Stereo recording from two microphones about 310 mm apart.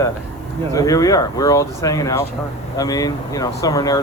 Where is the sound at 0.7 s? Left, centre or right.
Centre.